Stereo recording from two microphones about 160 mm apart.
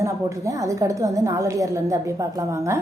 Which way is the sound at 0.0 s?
20° right (ahead or behind).